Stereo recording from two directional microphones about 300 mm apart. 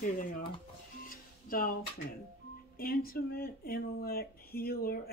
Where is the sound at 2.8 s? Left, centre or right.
Left.